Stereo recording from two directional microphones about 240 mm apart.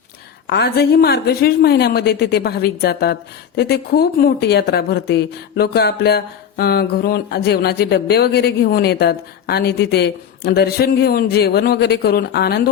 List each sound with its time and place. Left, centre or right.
0.4 s a woman's voice: left